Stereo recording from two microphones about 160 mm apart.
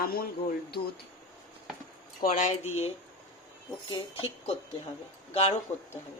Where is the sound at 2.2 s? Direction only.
55° left (ahead or behind).